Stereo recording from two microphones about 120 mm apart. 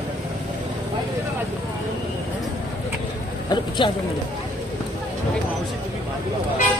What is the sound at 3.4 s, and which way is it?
Speech, 40° left (ahead or behind).